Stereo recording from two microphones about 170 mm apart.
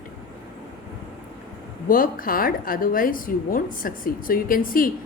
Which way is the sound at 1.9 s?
55° left (ahead or behind).